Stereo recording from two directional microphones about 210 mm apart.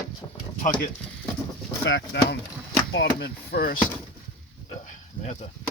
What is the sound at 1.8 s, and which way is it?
Speech, 55° left (ahead or behind).